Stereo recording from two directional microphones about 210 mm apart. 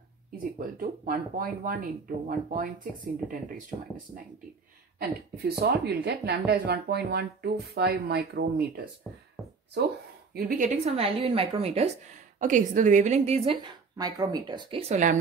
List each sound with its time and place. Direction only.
0.6 s speech: 40° right (ahead or behind)
5.4 s speech: 50° right (ahead or behind)
10.3 s speech: 40° right (ahead or behind)